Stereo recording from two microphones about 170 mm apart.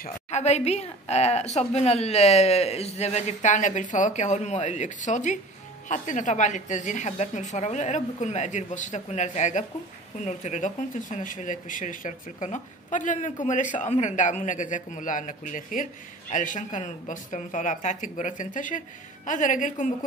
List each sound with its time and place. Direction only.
0.3 s a woman's voice: 40° left (ahead or behind)